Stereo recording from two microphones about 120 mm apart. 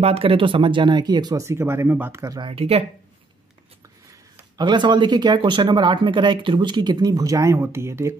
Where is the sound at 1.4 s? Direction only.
25° right (ahead or behind).